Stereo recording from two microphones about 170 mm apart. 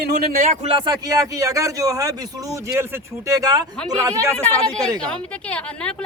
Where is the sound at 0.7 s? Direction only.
25° right (ahead or behind).